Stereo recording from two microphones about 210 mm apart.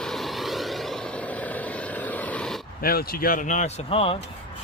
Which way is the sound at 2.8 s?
45° left (ahead or behind).